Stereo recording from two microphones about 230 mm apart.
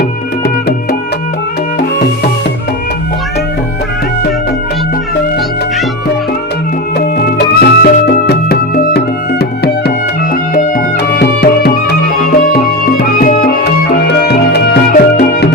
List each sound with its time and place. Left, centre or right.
7.2 s music: left